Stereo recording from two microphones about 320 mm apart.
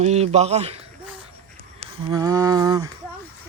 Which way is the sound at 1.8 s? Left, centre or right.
Centre.